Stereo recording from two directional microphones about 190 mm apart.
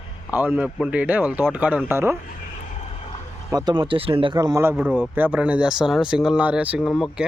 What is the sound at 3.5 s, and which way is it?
Speech, 20° right (ahead or behind).